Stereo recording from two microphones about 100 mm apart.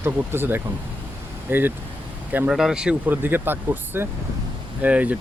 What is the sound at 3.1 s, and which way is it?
Speech, 20° right (ahead or behind).